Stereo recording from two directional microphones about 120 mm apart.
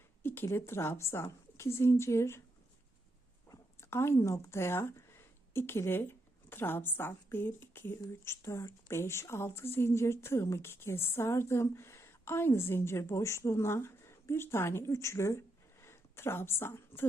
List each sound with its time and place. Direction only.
0.2 s a woman's voice: 20° left (ahead or behind)
3.5 s a woman's voice: 20° left (ahead or behind)